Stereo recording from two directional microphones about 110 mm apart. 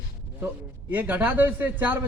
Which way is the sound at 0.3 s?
15° right (ahead or behind).